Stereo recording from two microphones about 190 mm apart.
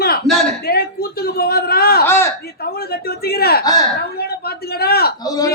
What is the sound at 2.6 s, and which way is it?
A man's voice, 55° left (ahead or behind).